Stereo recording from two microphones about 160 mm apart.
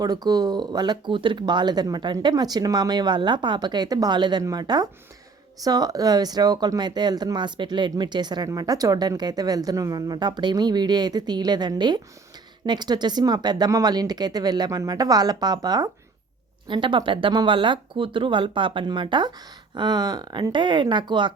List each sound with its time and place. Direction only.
0.0 s speech: 25° right (ahead or behind)